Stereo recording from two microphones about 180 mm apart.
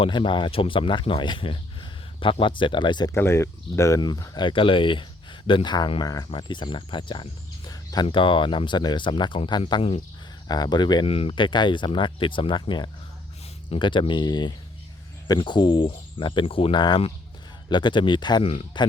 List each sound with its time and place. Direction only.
0.0 s speech: 25° left (ahead or behind)
3.2 s speech: 15° left (ahead or behind)
7.7 s a sound: 20° left (ahead or behind)
8.0 s speech: 30° left (ahead or behind)